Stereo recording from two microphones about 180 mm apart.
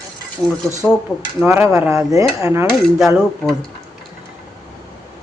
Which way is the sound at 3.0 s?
Centre (ahead or behind).